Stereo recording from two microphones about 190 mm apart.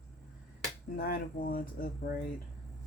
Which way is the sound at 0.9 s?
50° left (ahead or behind).